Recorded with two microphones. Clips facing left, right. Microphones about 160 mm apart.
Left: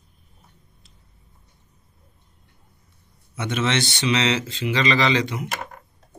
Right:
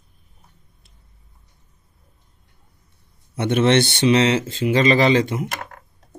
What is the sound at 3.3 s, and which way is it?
Speech, 55° right (ahead or behind).